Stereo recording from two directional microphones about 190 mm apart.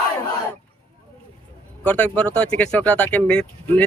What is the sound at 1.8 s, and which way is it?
Speech, 5° left (ahead or behind).